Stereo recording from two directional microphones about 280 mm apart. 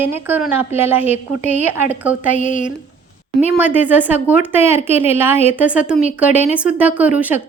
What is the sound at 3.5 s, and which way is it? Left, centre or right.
A woman's voice, centre.